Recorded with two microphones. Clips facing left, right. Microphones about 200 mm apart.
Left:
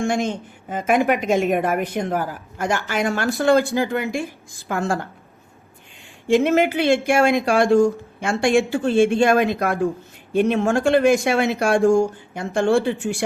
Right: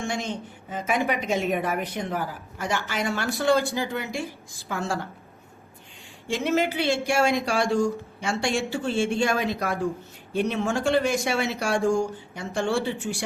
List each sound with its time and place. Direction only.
0.0 s a woman's voice: 50° left (ahead or behind)
6.2 s a woman's voice: 55° left (ahead or behind)